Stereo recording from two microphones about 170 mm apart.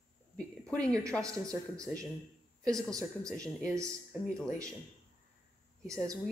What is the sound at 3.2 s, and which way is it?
Speech, 20° right (ahead or behind).